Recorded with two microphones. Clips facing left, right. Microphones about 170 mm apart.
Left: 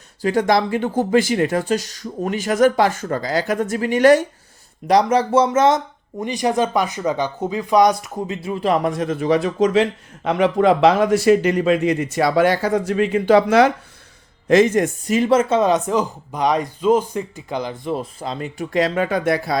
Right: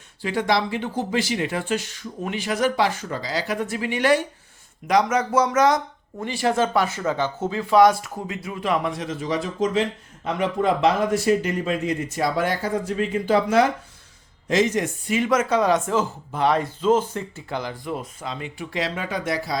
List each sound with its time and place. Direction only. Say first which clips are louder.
0.2 s speech: left 5 dB; 45° left (ahead or behind)
4.9 s speech: left 5 dB; 35° left (ahead or behind); by 13.7 s 80° left
14.4 s speech: left 7 dB; 55° left (ahead or behind)